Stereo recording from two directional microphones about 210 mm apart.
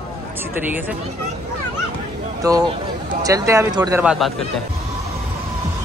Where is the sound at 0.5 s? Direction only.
10° right (ahead or behind).